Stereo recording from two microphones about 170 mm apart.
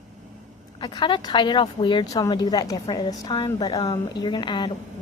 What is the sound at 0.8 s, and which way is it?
A woman's voice, 30° left (ahead or behind).